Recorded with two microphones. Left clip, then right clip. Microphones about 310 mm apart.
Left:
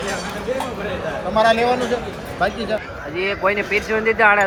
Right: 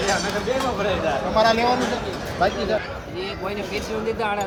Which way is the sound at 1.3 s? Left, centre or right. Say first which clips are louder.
Left 4 dB; left.